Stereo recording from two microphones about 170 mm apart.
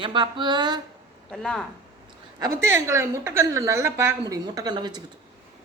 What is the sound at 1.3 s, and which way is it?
Speech, 5° left (ahead or behind).